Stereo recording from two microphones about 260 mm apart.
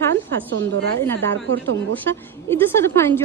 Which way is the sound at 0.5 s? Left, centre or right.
Right.